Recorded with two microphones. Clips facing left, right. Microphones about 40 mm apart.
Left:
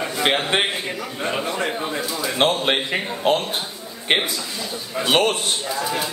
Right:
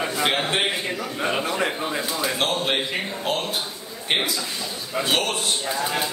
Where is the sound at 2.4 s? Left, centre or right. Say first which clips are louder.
Left 7 dB; left.